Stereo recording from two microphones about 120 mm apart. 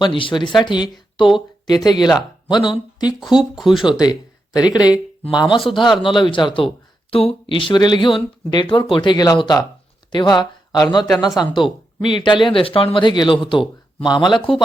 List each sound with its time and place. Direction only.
0.0 s speech: 45° left (ahead or behind)
3.2 s speech: 5° right (ahead or behind)
3.8 s speech: 35° left (ahead or behind)
12.0 s speech: 40° left (ahead or behind)